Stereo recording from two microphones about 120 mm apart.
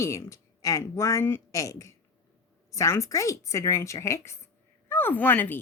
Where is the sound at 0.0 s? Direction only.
25° left (ahead or behind).